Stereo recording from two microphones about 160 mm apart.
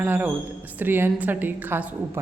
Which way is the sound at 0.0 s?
10° right (ahead or behind).